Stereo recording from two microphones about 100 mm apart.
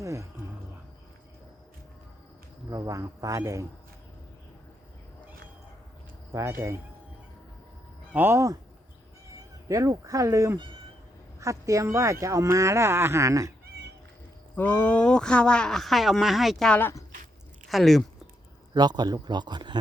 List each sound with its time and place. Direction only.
0.0 s a sound: 30° right (ahead or behind)
2.6 s speech: 35° right (ahead or behind)
6.3 s speech: 25° right (ahead or behind)
8.1 s speech: 20° right (ahead or behind)
9.6 s speech: 35° right (ahead or behind)
14.5 s speech: 15° left (ahead or behind); by 18.0 s centre (ahead or behind)
18.7 s speech: 45° right (ahead or behind)